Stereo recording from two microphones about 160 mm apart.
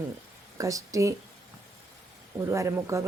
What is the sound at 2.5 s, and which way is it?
Speech, 20° right (ahead or behind).